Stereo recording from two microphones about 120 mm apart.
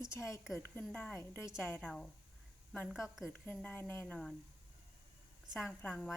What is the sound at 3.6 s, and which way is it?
Speech, 15° left (ahead or behind).